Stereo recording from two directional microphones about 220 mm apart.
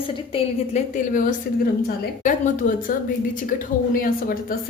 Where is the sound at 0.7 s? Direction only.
40° left (ahead or behind).